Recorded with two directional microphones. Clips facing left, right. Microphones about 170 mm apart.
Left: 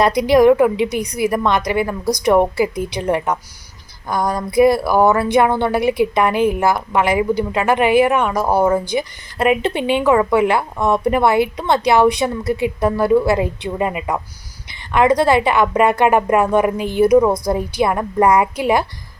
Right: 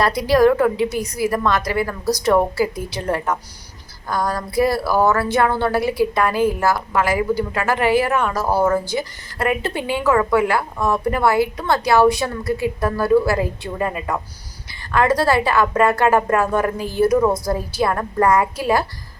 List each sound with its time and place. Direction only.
0.0 s a woman's voice: 20° left (ahead or behind)